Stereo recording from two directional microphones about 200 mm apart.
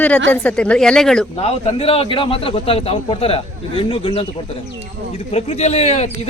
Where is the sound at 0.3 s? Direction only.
5° left (ahead or behind).